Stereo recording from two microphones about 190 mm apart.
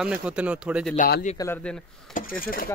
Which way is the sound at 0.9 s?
45° left (ahead or behind).